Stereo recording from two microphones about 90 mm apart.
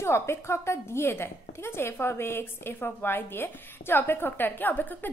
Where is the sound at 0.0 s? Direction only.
30° left (ahead or behind).